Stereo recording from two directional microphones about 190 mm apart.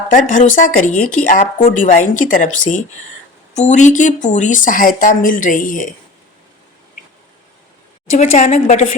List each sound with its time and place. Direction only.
0.1 s speech: 45° left (ahead or behind)
8.2 s a woman's voice: 40° left (ahead or behind)